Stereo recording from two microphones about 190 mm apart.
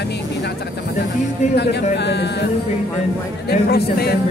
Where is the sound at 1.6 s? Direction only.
65° left (ahead or behind).